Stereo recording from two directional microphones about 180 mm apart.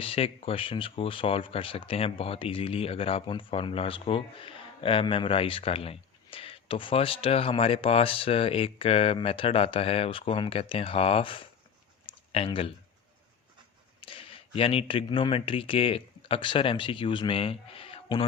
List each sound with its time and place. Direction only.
0.0 s speech: 30° left (ahead or behind)
14.0 s speech: 30° left (ahead or behind)